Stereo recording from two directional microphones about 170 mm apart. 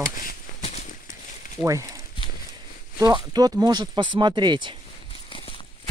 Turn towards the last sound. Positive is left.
turn(degrees=-25)  # may be behind; listen again after turning